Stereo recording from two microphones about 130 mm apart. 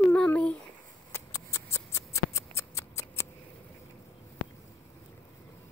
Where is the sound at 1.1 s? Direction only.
20° left (ahead or behind).